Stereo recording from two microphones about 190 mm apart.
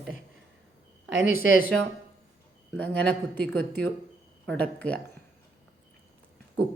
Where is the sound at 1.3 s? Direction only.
45° left (ahead or behind).